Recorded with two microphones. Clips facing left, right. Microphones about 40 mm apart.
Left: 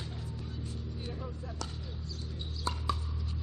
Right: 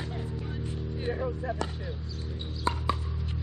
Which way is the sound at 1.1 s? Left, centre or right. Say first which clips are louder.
Right 11 dB; right.